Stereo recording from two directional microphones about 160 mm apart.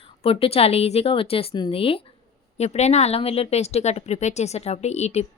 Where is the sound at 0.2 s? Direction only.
35° left (ahead or behind).